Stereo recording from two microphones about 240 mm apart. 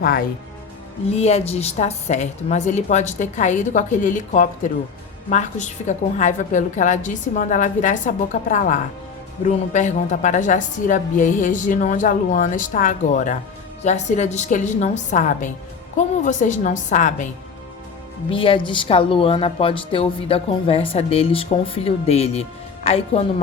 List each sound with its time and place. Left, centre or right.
0.0 s a woman's voice: left
1.1 s a woman's voice: left
18.3 s a woman's voice: left